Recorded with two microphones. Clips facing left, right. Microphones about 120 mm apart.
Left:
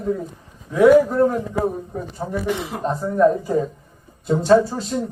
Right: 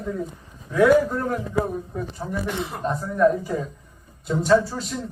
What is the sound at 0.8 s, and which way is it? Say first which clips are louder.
Speech: left 5 dB; 25° left (ahead or behind).